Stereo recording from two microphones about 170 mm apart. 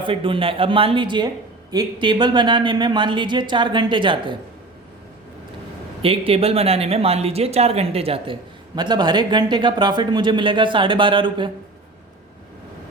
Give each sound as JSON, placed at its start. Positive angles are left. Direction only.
{"t": 0.0, "sound": "speech", "side_deg": -30}
{"t": 6.0, "sound": "speech", "side_deg": -35}